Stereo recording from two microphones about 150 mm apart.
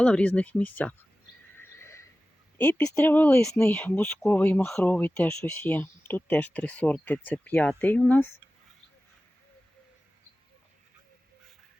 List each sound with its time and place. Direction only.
0.0 s speech: 10° left (ahead or behind)
1.5 s a sound: 15° left (ahead or behind)
2.6 s speech: 10° left (ahead or behind)